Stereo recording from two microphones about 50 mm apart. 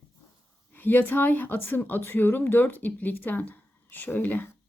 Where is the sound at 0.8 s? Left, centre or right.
Left.